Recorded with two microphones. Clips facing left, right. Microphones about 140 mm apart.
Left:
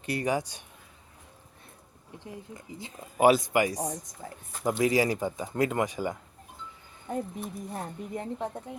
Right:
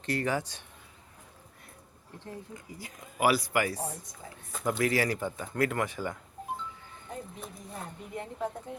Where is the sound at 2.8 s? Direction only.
25° left (ahead or behind).